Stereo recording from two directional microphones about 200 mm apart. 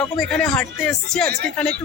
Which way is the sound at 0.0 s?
5° left (ahead or behind).